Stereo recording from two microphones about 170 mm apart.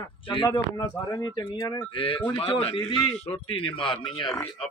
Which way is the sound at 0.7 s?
25° left (ahead or behind).